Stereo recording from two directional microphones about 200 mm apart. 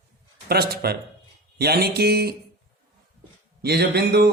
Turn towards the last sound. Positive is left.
turn(degrees=-55)  # may be behind; listen again after turning